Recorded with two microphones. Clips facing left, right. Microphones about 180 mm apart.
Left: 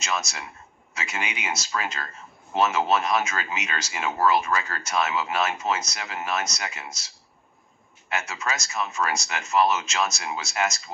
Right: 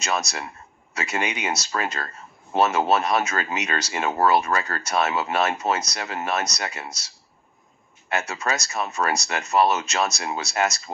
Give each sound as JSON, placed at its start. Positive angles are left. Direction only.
{"t": 0.2, "sound": "speech", "side_deg": -35}
{"t": 8.1, "sound": "speech", "side_deg": -35}